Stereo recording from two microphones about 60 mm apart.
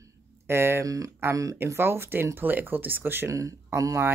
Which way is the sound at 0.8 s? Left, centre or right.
Right.